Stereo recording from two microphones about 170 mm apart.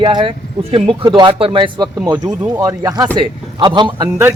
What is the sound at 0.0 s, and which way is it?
A man's voice, 30° right (ahead or behind).